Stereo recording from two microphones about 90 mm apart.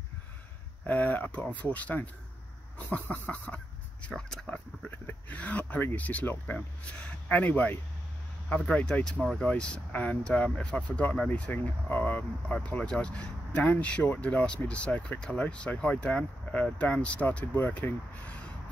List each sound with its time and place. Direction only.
0.8 s speech: 20° left (ahead or behind)